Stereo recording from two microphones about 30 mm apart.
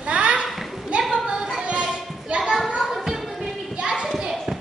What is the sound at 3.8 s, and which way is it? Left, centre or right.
Children playing, right.